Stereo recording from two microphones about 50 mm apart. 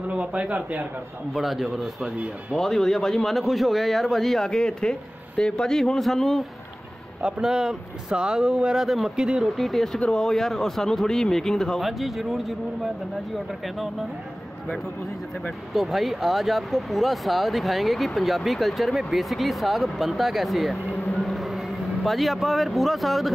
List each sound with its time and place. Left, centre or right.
0.1 s speech: right
1.3 s speech: centre
2.5 s speech: centre
7.2 s speech: centre
9.6 s speech: centre
9.9 s speech: left
10.2 s speech: centre
11.8 s speech: centre
15.7 s speech: centre